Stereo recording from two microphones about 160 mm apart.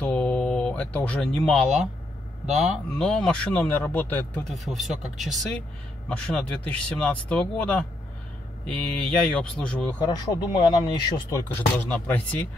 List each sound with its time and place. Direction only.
0.0 s a man's voice: 5° left (ahead or behind)
4.5 s a man's voice: centre (ahead or behind)
9.9 s speech: 25° left (ahead or behind); by 12.4 s 10° left (ahead or behind)